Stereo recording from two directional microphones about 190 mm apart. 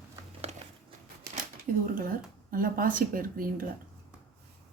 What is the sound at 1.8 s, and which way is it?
Speech, 45° right (ahead or behind).